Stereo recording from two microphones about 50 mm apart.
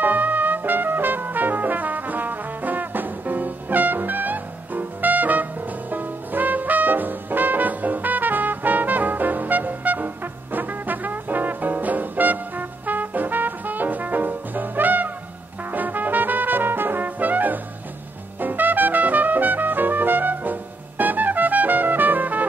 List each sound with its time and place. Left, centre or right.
0.0 s brass instrument: right
18.4 s music: right